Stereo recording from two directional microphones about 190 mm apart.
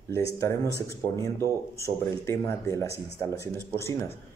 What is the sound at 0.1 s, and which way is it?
Speech, 15° left (ahead or behind).